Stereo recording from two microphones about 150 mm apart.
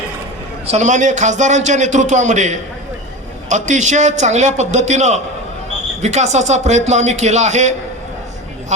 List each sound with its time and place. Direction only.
0.7 s a man's voice: 55° right (ahead or behind)